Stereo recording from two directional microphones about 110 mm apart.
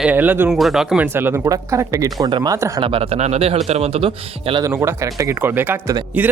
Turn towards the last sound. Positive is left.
turn(degrees=-15)  # may be behind; listen again after turning